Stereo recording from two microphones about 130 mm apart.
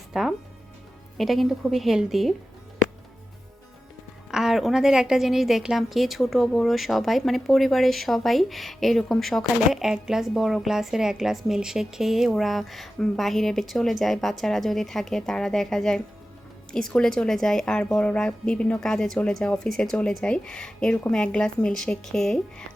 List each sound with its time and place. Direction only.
0.1 s music: centre (ahead or behind)
1.2 s a woman's voice: centre (ahead or behind)
4.3 s a woman's voice: 5° right (ahead or behind)